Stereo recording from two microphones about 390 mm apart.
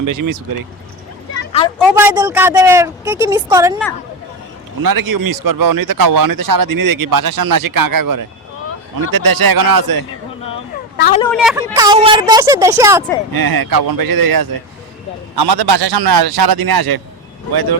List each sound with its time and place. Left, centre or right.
0.0 s speech: right
1.8 s a woman's voice: centre
4.8 s speech: right
10.9 s speech: left
11.2 s a woman's voice: centre
13.3 s speech: right
15.4 s a man's voice: right